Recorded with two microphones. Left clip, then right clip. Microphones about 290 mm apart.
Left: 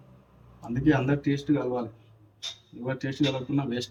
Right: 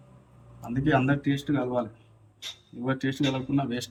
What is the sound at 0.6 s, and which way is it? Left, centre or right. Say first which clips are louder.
Speech: even; centre.